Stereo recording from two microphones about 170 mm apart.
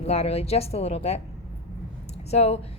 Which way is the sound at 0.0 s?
40° left (ahead or behind).